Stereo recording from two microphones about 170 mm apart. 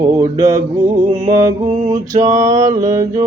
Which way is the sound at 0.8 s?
45° right (ahead or behind).